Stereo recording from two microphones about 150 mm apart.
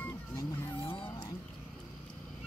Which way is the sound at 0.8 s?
35° left (ahead or behind).